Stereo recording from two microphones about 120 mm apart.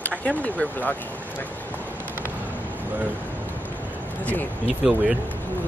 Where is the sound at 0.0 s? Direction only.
10° left (ahead or behind).